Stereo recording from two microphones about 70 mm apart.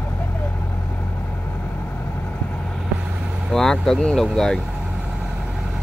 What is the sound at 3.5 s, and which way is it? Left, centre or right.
Speech, centre.